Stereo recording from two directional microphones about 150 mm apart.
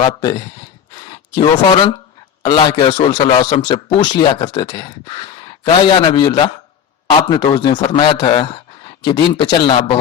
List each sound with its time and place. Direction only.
0.0 s a man's voice: 30° left (ahead or behind)